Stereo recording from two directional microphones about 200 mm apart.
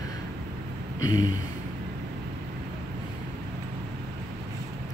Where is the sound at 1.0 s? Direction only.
90° left.